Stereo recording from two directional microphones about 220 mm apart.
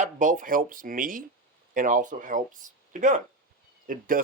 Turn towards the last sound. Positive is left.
turn(degrees=-40)  # may be behind; listen again after turning